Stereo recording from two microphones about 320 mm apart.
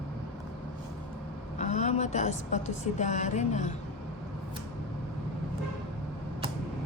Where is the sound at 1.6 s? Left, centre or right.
Left.